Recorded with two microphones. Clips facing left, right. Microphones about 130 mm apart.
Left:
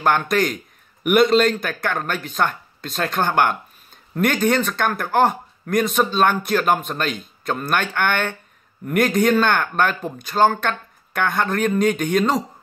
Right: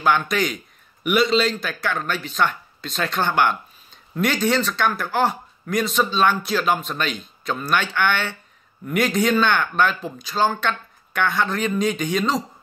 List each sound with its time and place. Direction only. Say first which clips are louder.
0.0 s a man's voice: left 2 dB; 50° left (ahead or behind)